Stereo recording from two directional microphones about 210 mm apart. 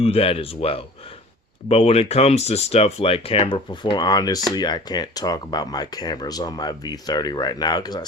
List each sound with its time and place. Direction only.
0.0 s speech: 25° left (ahead or behind)